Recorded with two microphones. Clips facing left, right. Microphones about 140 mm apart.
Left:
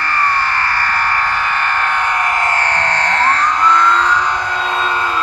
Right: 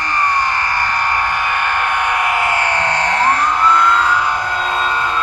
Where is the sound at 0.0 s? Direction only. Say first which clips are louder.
Even; 15° right (ahead or behind).